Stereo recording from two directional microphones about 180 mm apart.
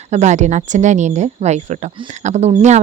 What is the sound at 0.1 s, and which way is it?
Speech, 40° right (ahead or behind).